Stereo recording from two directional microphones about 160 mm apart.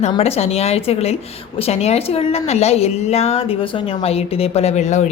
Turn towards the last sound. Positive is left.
turn(degrees=45)  # may be behind; listen again after turning